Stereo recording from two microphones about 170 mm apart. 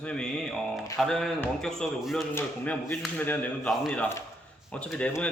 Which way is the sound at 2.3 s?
15° left (ahead or behind).